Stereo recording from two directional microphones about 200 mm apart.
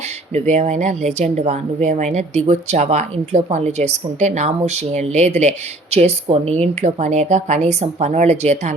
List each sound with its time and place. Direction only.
0.3 s speech: 35° right (ahead or behind)